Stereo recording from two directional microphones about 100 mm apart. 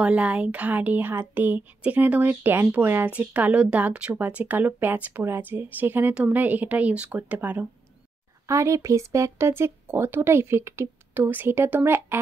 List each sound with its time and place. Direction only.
0.0 s speech: 15° right (ahead or behind)
8.5 s speech: 30° right (ahead or behind)